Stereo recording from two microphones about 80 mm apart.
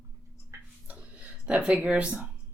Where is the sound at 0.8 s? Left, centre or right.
Centre.